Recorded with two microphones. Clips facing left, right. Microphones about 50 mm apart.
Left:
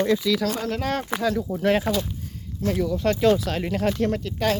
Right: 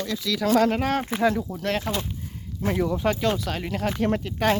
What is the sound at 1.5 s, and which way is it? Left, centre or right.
Speech, centre.